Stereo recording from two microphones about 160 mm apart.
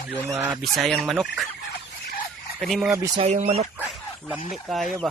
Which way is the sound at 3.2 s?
40° right (ahead or behind).